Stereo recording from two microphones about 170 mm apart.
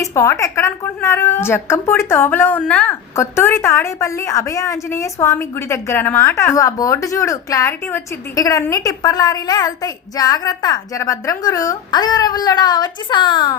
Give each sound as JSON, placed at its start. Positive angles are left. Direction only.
{"t": 0.0, "sound": "a woman's voice", "side_deg": 15}